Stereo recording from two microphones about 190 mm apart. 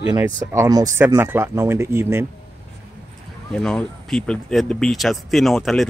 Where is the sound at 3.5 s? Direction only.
5° left (ahead or behind).